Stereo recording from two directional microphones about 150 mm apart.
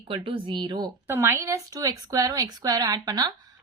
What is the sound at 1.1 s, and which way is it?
A woman's voice, 20° right (ahead or behind).